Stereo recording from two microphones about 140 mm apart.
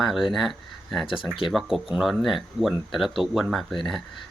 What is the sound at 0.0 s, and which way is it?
Speech, centre (ahead or behind).